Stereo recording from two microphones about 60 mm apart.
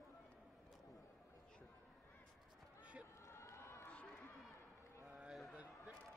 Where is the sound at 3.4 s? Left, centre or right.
Left.